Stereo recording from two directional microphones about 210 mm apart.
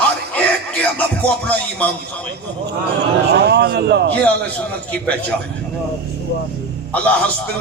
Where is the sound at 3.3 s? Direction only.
50° right (ahead or behind).